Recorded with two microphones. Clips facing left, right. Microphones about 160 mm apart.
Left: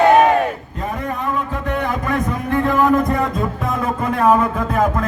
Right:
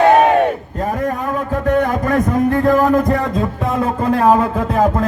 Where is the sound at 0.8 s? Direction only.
45° right (ahead or behind).